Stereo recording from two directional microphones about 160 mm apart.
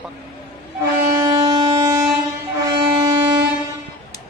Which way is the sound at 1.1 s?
25° right (ahead or behind).